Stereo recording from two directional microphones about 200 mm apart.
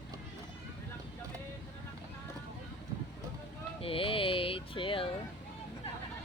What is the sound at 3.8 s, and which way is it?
Music, 25° left (ahead or behind).